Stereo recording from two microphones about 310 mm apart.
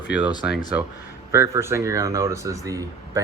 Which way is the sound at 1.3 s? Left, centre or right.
Centre.